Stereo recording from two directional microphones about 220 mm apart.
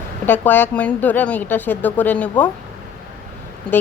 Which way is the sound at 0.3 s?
10° left (ahead or behind).